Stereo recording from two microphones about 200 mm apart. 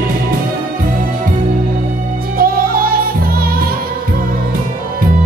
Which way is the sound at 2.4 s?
45° right (ahead or behind).